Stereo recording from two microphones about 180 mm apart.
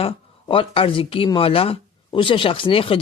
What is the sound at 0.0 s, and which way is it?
Speech, 30° left (ahead or behind).